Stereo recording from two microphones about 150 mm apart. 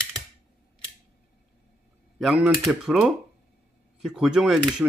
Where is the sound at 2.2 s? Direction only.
Centre (ahead or behind).